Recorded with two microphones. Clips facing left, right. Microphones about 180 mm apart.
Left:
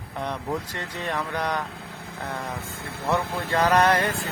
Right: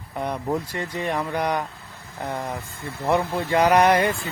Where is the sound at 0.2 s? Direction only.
10° right (ahead or behind).